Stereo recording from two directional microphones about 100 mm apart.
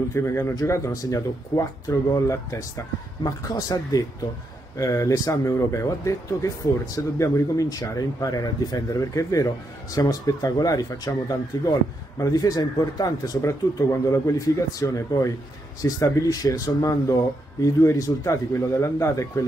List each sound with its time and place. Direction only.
0.1 s speech: 25° left (ahead or behind)